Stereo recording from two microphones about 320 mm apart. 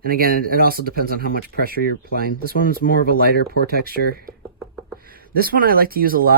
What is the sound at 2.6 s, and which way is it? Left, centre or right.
Speech, left.